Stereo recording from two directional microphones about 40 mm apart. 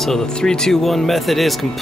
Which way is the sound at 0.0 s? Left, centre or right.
Centre.